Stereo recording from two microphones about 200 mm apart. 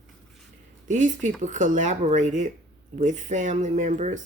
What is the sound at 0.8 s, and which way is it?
Speech, 40° right (ahead or behind).